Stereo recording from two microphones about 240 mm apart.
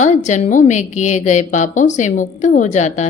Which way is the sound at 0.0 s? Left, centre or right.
Left.